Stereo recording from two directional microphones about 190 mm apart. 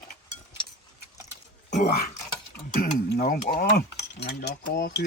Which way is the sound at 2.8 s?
50° left (ahead or behind).